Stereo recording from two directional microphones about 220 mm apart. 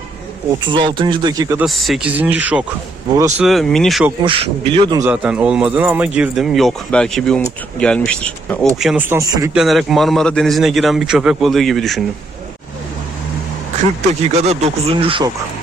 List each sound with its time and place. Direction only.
0.6 s speech: 20° right (ahead or behind)
1.6 s speech: centre (ahead or behind)
3.4 s speech: centre (ahead or behind)
4.2 s speech: 25° right (ahead or behind)
5.0 s speech: 5° right (ahead or behind)
9.6 s speech: centre (ahead or behind)
14.4 s speech: 30° right (ahead or behind)